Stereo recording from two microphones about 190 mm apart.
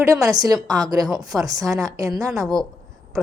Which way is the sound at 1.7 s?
15° right (ahead or behind).